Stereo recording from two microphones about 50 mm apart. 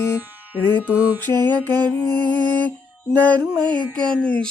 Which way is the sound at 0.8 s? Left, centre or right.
Right.